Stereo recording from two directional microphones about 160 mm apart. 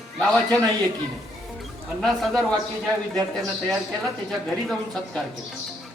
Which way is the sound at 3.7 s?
5° left (ahead or behind).